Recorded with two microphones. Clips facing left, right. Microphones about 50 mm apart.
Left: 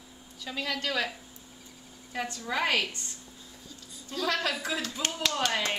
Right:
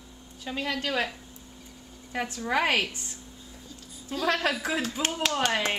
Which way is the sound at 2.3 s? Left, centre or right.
Right.